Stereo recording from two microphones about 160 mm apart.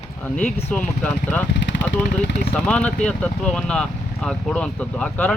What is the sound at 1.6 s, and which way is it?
Vehicle, 90° left.